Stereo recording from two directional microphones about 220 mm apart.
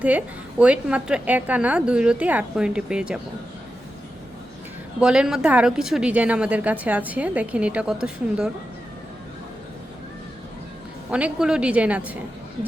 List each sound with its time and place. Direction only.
0.0 s a woman's voice: 5° right (ahead or behind)
4.9 s a woman's voice: 5° right (ahead or behind)
11.1 s a woman's voice: 5° right (ahead or behind)